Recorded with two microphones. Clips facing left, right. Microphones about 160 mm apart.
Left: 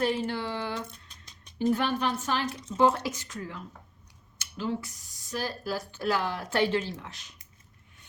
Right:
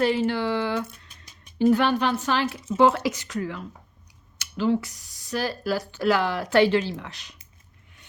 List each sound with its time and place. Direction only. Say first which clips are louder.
0.0 s speech: right 6 dB; 85° right
0.9 s a sound: right 2 dB; 5° right (ahead or behind)
1.5 s speech: right 7 dB; 80° right